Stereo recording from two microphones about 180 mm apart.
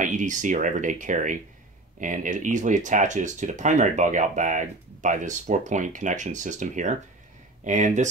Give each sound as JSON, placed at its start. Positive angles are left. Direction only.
{"t": 0.0, "sound": "speech", "side_deg": -45}